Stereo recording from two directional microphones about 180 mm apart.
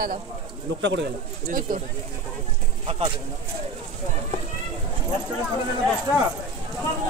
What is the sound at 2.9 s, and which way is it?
Speech, 35° right (ahead or behind).